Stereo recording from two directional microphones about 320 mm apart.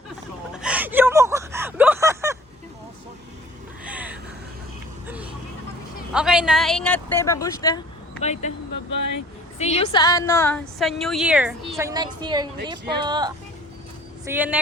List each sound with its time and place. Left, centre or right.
0.5 s a sound: centre
3.8 s a sound: centre
5.0 s vehicle: centre
6.1 s a woman's voice: centre; by 8.5 s left
9.0 s speech: left
9.6 s a woman's voice: centre